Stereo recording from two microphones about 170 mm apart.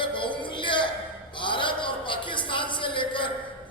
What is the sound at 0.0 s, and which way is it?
Music, 30° left (ahead or behind).